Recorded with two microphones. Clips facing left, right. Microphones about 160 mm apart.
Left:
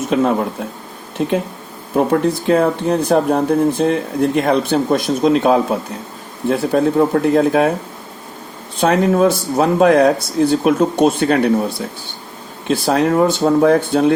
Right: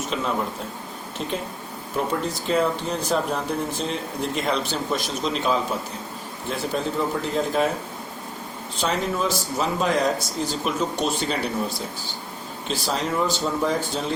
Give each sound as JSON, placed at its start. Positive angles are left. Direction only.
{"t": 0.1, "sound": "speech", "side_deg": 55}
{"t": 2.0, "sound": "speech", "side_deg": 60}
{"t": 8.8, "sound": "speech", "side_deg": 60}
{"t": 12.6, "sound": "speech", "side_deg": 60}